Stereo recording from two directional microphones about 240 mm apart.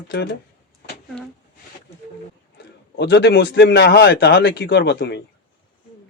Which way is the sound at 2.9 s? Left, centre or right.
Left.